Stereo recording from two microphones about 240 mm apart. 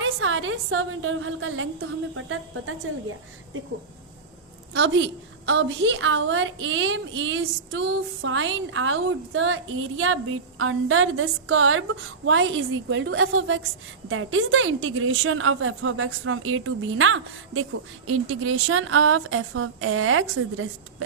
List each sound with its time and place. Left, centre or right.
0.0 s a woman's voice: right
4.7 s a woman's voice: right